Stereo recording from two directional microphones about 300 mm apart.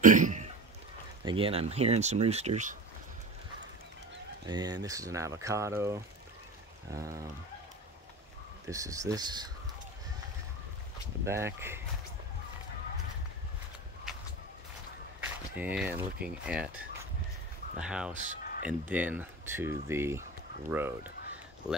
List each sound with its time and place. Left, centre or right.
0.0 s cough: right
1.2 s speech: centre
4.5 s speech: centre
8.6 s speech: centre
11.2 s speech: centre
14.1 s a sound: centre
15.5 s speech: centre
17.7 s speech: centre
18.1 s speech: right
18.7 s speech: centre